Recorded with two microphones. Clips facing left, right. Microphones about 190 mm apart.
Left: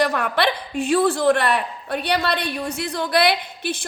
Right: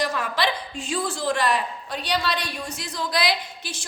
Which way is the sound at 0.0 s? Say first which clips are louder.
Left 5 dB; 60° left (ahead or behind).